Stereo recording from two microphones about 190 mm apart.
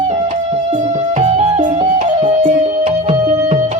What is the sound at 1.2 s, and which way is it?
Music, 35° right (ahead or behind).